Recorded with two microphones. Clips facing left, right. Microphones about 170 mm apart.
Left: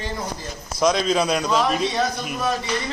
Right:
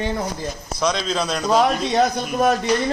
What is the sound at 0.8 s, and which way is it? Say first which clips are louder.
Speech: left 3 dB; 5° left (ahead or behind).